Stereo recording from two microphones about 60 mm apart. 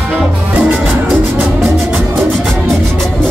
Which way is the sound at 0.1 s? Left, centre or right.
Right.